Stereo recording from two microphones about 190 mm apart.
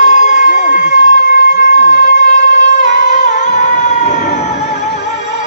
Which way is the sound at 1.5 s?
40° left (ahead or behind).